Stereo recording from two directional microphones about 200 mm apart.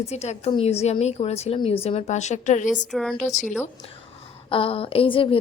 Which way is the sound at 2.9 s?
Centre (ahead or behind).